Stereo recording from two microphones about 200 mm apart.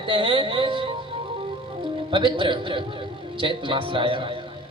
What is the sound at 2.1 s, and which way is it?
A man's voice, 25° right (ahead or behind).